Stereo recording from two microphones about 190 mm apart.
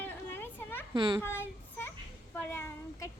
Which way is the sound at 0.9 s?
20° right (ahead or behind).